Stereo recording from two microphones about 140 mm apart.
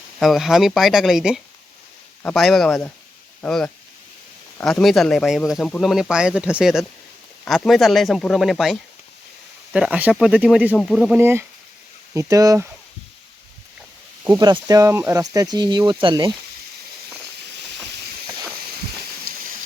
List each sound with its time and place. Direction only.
0.2 s speech: centre (ahead or behind)
11.2 s speech: 15° right (ahead or behind)
14.3 s speech: 30° right (ahead or behind)